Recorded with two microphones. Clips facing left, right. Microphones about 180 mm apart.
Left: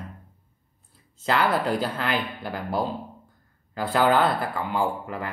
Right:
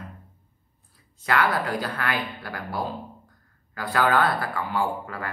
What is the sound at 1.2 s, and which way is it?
Speech, 25° left (ahead or behind).